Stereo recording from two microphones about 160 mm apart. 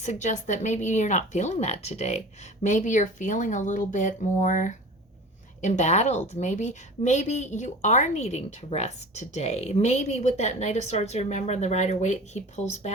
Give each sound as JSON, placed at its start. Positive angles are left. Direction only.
{"t": 0.0, "sound": "a woman's voice", "side_deg": 45}